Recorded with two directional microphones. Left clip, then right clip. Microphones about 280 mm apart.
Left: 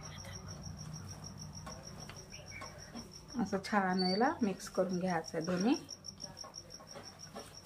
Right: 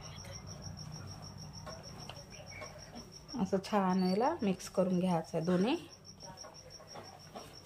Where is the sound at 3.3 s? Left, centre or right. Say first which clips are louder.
Right 1 dB; right.